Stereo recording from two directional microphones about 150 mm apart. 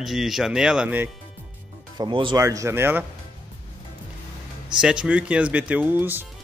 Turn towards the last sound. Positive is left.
turn(degrees=-15)  # may be behind; listen again after turning